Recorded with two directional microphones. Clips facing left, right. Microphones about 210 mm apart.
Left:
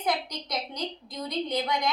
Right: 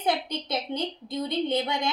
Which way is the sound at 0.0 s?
25° right (ahead or behind).